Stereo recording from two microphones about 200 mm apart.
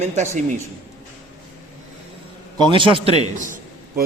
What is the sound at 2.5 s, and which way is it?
Speech, 20° right (ahead or behind).